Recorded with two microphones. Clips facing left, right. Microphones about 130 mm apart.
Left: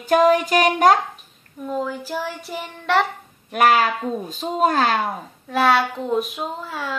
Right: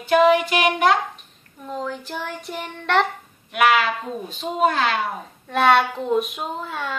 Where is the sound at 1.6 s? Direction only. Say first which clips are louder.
Left 3 dB; 5° left (ahead or behind).